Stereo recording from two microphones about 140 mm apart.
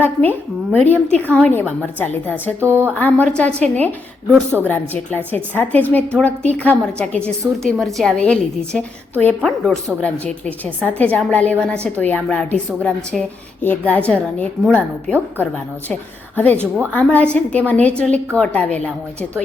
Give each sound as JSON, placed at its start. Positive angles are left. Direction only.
{"t": 0.0, "sound": "a woman's voice", "side_deg": 15}
{"t": 2.6, "sound": "speech", "side_deg": -15}
{"t": 2.9, "sound": "a woman's voice", "side_deg": 10}
{"t": 4.3, "sound": "speech", "side_deg": -10}
{"t": 4.7, "sound": "a woman's voice", "side_deg": 15}
{"t": 16.6, "sound": "speech", "side_deg": -15}
{"t": 16.9, "sound": "a woman's voice", "side_deg": 10}